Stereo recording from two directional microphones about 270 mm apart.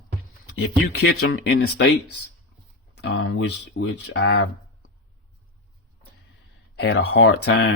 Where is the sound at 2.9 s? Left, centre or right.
Left.